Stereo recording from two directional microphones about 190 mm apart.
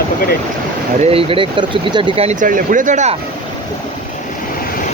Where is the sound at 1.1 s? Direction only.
30° right (ahead or behind).